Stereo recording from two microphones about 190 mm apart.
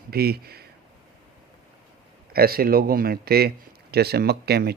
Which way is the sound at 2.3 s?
55° right (ahead or behind).